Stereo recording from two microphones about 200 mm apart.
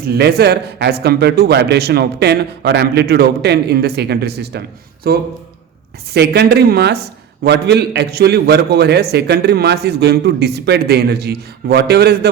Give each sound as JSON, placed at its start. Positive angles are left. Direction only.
{"t": 0.1, "sound": "a man's voice", "side_deg": -50}